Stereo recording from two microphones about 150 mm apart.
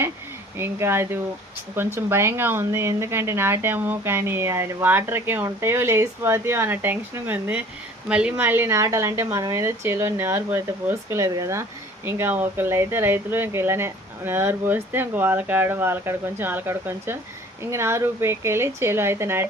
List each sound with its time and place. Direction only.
0.6 s speech: 15° right (ahead or behind)